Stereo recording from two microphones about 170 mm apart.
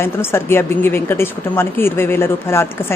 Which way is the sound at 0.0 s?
15° left (ahead or behind).